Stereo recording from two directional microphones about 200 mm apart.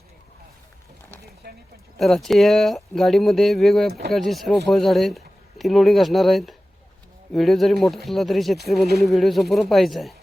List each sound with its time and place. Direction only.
1.4 s speech: 50° right (ahead or behind)
2.0 s speech: centre (ahead or behind)